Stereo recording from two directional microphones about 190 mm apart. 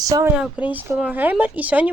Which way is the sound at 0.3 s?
5° right (ahead or behind).